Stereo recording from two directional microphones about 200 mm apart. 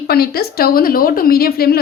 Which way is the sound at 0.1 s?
50° left (ahead or behind).